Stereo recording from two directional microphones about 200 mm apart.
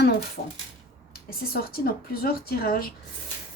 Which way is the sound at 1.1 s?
50° left (ahead or behind).